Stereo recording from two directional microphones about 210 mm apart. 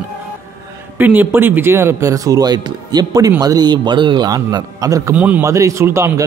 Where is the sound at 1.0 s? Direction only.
10° right (ahead or behind).